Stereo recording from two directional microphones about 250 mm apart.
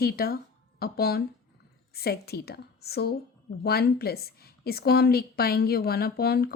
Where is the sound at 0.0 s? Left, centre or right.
Left.